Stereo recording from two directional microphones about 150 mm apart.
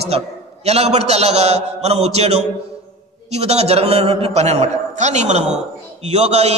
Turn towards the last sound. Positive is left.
turn(degrees=-45)  # may be behind; listen again after turning